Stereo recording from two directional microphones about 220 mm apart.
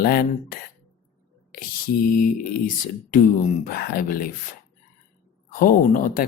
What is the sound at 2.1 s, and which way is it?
Speech, 40° left (ahead or behind).